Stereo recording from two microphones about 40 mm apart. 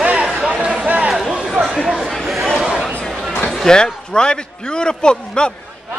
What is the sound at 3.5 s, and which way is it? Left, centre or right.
A man's voice, centre.